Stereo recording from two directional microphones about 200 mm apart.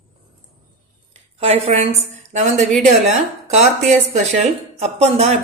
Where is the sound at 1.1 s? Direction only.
30° right (ahead or behind).